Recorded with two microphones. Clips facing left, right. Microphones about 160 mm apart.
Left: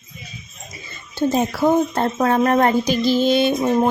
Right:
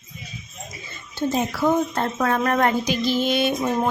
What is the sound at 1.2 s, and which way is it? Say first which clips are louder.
A woman's voice: left 4 dB; 40° left (ahead or behind).